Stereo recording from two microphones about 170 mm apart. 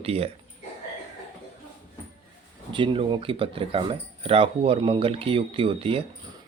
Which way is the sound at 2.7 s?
30° right (ahead or behind).